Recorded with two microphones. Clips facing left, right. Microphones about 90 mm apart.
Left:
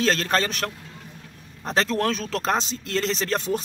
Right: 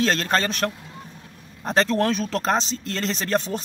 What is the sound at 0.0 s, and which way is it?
Speech, centre (ahead or behind).